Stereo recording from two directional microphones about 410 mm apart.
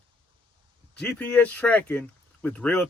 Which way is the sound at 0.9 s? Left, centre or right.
Centre.